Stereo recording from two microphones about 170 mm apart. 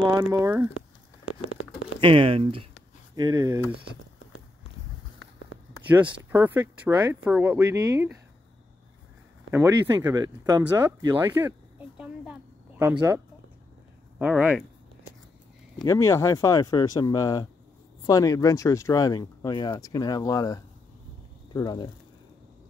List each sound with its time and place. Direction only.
0.0 s speech: 20° right (ahead or behind)
2.0 s speech: 30° right (ahead or behind)
3.2 s speech: 20° right (ahead or behind)
6.3 s speech: 10° right (ahead or behind)
9.5 s speech: 15° right (ahead or behind)
12.0 s a sound: 10° right (ahead or behind)
14.1 s speech: 5° right (ahead or behind)
15.8 s speech: 15° left (ahead or behind)